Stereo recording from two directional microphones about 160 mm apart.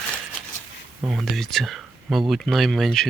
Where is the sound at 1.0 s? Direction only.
Centre (ahead or behind).